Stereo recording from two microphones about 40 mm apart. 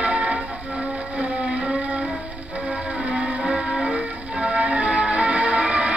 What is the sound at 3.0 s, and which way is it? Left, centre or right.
Music, right.